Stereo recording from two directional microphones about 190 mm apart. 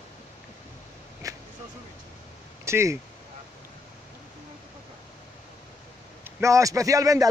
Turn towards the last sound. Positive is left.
turn(degrees=-20)  # may be behind; listen again after turning